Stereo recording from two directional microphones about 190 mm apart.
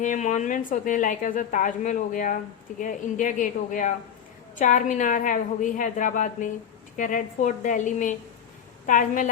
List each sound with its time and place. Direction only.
0.0 s a woman's voice: 40° left (ahead or behind)